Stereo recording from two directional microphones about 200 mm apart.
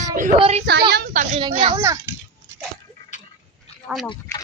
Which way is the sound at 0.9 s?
45° right (ahead or behind).